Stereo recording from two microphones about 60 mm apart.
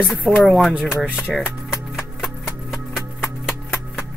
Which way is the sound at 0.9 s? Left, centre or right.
Centre.